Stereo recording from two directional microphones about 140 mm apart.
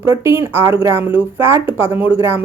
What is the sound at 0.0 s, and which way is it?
Speech, 20° right (ahead or behind).